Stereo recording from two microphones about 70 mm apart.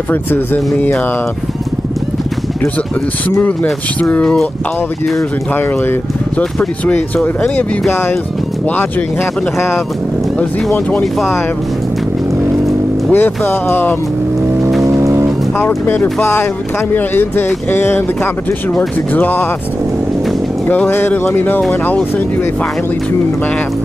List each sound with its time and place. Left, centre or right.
0.1 s speech: left
3.3 s speech: left
6.6 s speech: centre
13.1 s speech: left
14.9 s music: right
15.6 s speech: left
20.6 s speech: left